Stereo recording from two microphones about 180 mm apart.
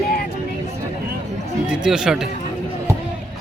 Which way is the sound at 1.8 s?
5° right (ahead or behind).